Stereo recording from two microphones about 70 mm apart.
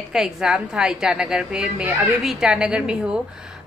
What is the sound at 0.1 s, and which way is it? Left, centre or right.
A child's voice, centre.